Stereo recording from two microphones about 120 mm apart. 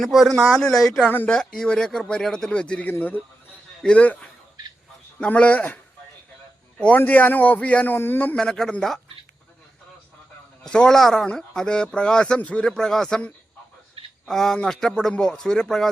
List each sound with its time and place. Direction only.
0.0 s a man's voice: centre (ahead or behind)
10.6 s speech: 5° left (ahead or behind)